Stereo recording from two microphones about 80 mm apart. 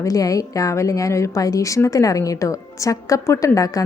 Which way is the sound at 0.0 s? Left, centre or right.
Left.